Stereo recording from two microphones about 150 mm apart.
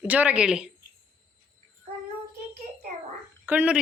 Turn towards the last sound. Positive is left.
turn(degrees=-10)  # may be behind; listen again after turning